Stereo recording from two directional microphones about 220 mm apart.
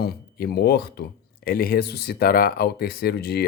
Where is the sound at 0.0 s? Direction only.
45° left (ahead or behind).